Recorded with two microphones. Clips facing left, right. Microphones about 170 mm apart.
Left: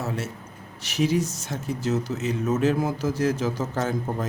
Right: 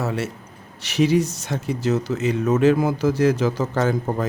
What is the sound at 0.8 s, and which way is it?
Speech, 70° right (ahead or behind).